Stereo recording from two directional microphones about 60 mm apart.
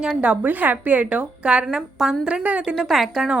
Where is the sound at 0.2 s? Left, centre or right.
Right.